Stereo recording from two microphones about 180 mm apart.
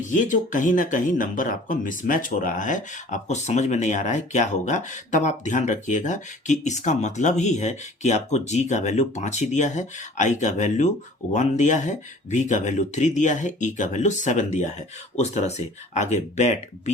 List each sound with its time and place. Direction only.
0.0 s speech: 45° left (ahead or behind)